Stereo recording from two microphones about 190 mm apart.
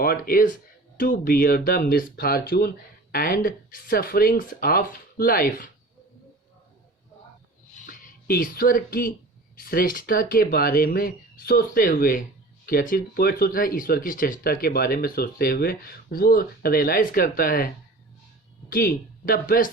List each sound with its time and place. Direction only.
0.0 s speech: 50° left (ahead or behind)
7.9 s speech: 45° left (ahead or behind)
18.7 s speech: 50° left (ahead or behind)